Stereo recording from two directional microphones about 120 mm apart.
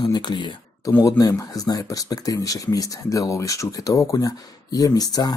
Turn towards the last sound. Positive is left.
turn(degrees=30)  # may be behind; listen again after turning